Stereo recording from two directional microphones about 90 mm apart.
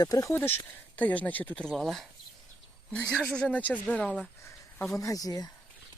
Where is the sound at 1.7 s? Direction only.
Centre (ahead or behind).